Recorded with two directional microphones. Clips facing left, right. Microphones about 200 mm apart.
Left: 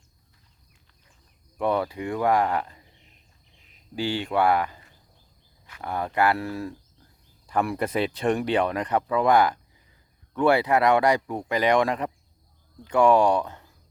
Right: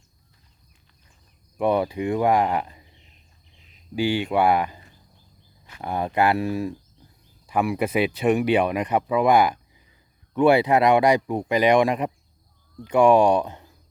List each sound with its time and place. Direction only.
1.5 s speech: 15° right (ahead or behind)
3.9 s speech: 15° right (ahead or behind)